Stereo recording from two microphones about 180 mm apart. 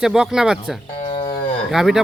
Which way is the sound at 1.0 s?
30° left (ahead or behind).